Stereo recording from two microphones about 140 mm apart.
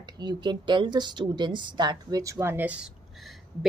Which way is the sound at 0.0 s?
30° right (ahead or behind).